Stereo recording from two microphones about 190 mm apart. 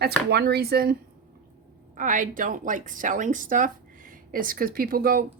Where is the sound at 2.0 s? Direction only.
45° right (ahead or behind).